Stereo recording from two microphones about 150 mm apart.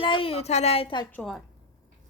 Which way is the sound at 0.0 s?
35° left (ahead or behind).